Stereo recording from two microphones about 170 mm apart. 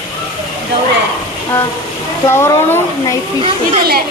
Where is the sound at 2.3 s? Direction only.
15° left (ahead or behind).